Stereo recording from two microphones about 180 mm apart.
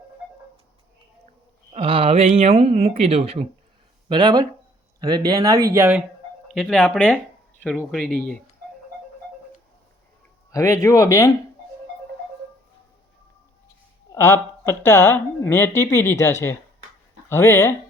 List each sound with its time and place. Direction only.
1.7 s speech: 30° right (ahead or behind); by 6.0 s 15° right (ahead or behind)
6.5 s speech: centre (ahead or behind)
10.5 s speech: 15° left (ahead or behind)
14.1 s speech: 15° left (ahead or behind)